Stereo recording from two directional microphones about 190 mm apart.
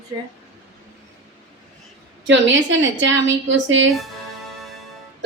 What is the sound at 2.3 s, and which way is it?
A woman's voice, 80° right.